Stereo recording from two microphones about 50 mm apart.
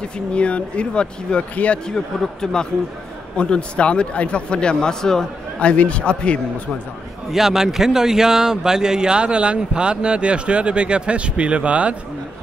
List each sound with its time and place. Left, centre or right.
0.3 s a man's voice: left
5.6 s speech: left
7.2 s a man's voice: centre; by 11.9 s right